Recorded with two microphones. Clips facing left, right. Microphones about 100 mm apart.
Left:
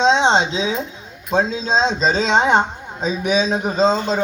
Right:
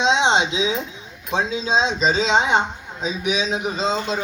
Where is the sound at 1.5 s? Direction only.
5° right (ahead or behind).